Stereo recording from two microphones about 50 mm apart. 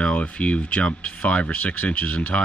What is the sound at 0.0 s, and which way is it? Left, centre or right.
Speech, left.